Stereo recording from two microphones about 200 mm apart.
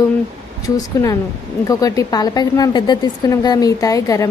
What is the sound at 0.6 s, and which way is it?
Speech, 15° left (ahead or behind).